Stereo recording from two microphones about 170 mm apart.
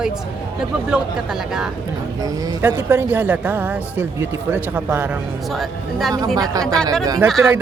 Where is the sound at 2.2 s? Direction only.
15° right (ahead or behind).